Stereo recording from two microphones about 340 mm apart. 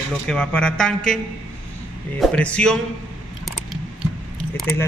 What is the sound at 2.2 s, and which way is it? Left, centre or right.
Speech, centre.